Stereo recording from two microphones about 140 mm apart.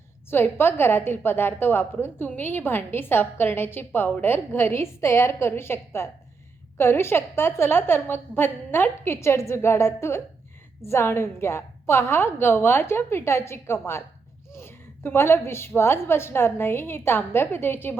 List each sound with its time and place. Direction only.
0.3 s a woman's voice: 15° left (ahead or behind)